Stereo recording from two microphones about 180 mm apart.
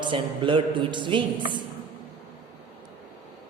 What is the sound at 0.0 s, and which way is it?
A woman's voice, 25° right (ahead or behind).